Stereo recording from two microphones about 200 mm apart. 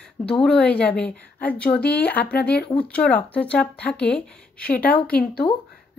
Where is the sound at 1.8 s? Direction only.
55° left (ahead or behind).